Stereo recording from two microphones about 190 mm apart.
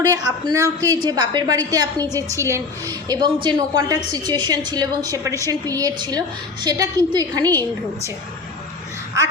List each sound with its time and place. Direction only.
0.0 s a woman's voice: 15° right (ahead or behind)